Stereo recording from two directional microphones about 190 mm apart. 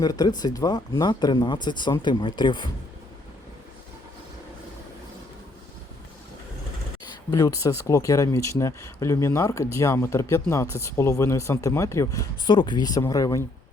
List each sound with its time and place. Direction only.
0.0 s speech: 20° left (ahead or behind)
7.3 s speech: 20° left (ahead or behind)